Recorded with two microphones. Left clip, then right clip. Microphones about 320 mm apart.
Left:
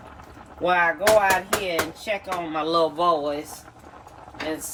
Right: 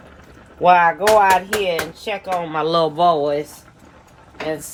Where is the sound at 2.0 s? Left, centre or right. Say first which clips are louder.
Right 5 dB; centre.